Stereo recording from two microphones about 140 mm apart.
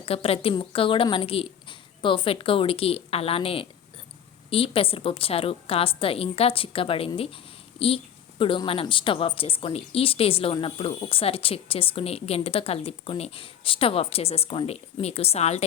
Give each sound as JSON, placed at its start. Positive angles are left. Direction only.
{"t": 0.0, "sound": "a woman's voice", "side_deg": 45}